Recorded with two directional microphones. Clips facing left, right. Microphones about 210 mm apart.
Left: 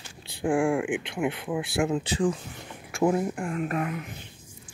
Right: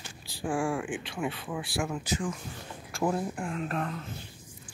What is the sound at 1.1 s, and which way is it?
Speech, 15° left (ahead or behind).